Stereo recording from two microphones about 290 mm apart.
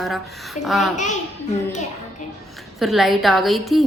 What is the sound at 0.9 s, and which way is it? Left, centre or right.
Speech, left.